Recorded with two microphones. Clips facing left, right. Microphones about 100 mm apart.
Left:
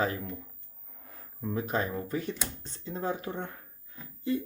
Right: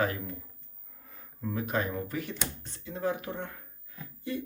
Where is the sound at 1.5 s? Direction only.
30° left (ahead or behind).